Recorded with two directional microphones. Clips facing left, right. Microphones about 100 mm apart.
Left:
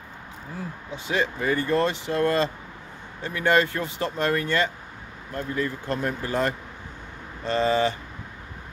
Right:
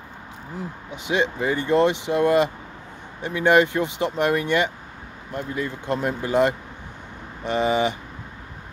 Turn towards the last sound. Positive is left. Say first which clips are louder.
# right 1 dB
turn(degrees=-15)  # may be behind; listen again after turning